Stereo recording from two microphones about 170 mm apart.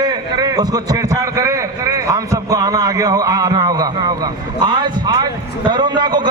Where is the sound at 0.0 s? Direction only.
25° right (ahead or behind).